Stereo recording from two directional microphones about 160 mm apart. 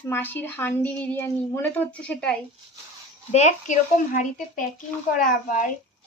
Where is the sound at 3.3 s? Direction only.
45° left (ahead or behind).